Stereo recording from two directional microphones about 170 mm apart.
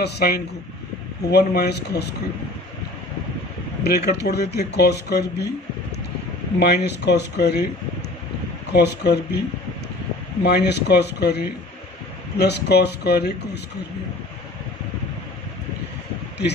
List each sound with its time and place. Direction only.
0.0 s speech: 70° left (ahead or behind)
3.8 s speech: 70° left (ahead or behind)
6.6 s speech: 75° left (ahead or behind)
8.7 s speech: 75° left (ahead or behind)
10.4 s speech: 75° left (ahead or behind)